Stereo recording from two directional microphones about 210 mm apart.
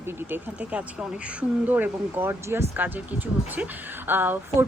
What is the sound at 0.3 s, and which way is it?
Speech, 5° right (ahead or behind).